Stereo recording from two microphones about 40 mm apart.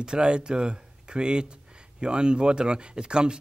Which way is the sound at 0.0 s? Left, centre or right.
Right.